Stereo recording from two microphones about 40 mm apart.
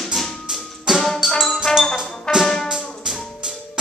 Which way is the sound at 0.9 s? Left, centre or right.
Centre.